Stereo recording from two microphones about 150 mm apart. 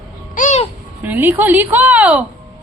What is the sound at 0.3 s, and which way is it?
Babbling, 60° left (ahead or behind).